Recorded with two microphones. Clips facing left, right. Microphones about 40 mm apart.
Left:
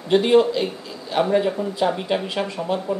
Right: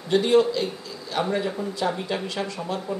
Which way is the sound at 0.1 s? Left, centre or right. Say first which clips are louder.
Left 3 dB; left.